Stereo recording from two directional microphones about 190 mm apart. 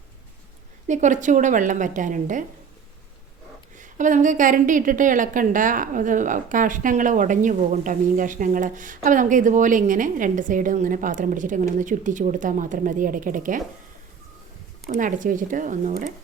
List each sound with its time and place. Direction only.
0.9 s a woman's voice: 40° right (ahead or behind)
3.8 s a woman's voice: 40° right (ahead or behind)
14.8 s a woman's voice: 45° right (ahead or behind)